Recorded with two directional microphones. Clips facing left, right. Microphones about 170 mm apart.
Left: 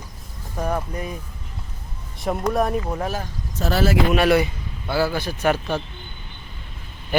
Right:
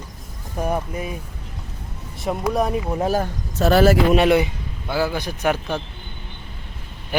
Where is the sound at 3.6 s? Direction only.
60° right (ahead or behind).